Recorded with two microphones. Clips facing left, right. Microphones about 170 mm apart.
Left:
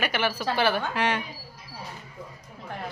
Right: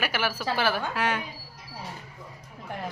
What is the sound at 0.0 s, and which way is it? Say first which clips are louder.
A woman's voice: left 2 dB; 5° right (ahead or behind).